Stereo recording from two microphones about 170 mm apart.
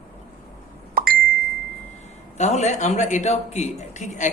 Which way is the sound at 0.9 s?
60° right (ahead or behind).